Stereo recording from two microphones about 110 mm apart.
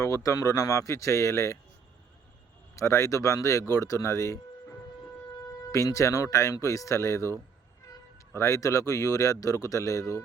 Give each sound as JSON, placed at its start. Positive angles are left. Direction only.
{"t": 0.0, "sound": "speech", "side_deg": 30}
{"t": 2.7, "sound": "speech", "side_deg": 25}
{"t": 5.7, "sound": "speech", "side_deg": 30}